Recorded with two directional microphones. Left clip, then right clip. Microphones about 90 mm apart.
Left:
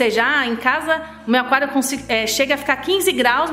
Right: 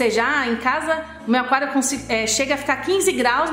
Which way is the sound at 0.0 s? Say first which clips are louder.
Left 2 dB; 25° left (ahead or behind).